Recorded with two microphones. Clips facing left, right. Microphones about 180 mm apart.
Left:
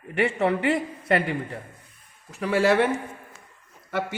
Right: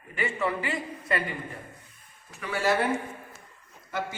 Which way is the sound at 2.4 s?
80° left.